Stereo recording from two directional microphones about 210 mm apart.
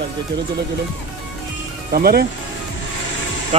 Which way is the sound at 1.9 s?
45° right (ahead or behind).